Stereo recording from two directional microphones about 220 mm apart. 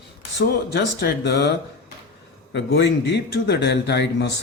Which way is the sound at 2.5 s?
55° left (ahead or behind).